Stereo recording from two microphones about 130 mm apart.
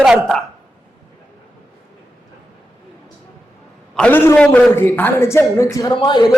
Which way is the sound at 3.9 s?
10° left (ahead or behind).